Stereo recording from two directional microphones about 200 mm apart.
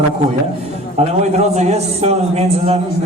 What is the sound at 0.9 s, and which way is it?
A man's voice, 35° right (ahead or behind).